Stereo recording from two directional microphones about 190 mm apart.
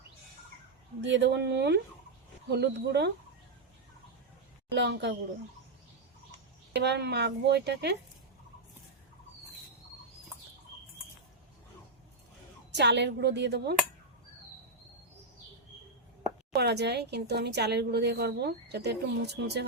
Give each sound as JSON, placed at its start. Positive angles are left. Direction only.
{"t": 1.0, "sound": "a woman's voice", "side_deg": -65}
{"t": 4.7, "sound": "a woman's voice", "side_deg": -65}
{"t": 6.7, "sound": "a woman's voice", "side_deg": -60}
{"t": 12.7, "sound": "a woman's voice", "side_deg": -65}
{"t": 16.6, "sound": "a woman's voice", "side_deg": -60}